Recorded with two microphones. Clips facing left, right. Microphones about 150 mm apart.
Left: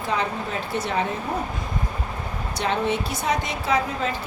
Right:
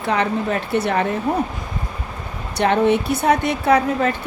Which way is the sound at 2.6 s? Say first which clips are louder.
Right 8 dB; 60° right (ahead or behind).